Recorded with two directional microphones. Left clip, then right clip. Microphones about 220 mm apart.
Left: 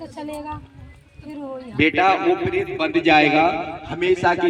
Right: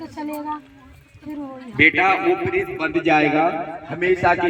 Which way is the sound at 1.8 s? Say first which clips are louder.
Right 2 dB; 5° left (ahead or behind).